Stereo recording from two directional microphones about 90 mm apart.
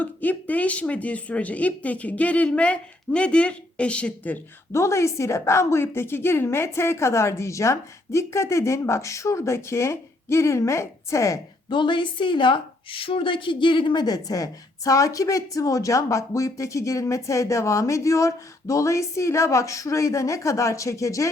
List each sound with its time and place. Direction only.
0.0 s speech: 20° left (ahead or behind)
4.7 s a woman's voice: 35° left (ahead or behind)
11.7 s a woman's voice: 60° left (ahead or behind); by 21.2 s 35° left (ahead or behind)